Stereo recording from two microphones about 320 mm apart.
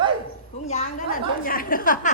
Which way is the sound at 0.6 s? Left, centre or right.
Left.